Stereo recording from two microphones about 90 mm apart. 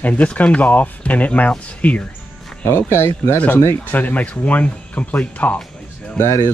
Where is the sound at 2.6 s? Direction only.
25° left (ahead or behind).